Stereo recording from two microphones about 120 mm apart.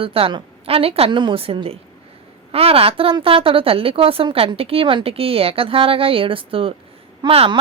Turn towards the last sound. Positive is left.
turn(degrees=-55)  # may be behind; listen again after turning